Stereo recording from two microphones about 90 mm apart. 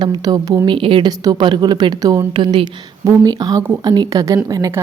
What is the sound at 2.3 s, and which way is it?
Speech, 70° right (ahead or behind).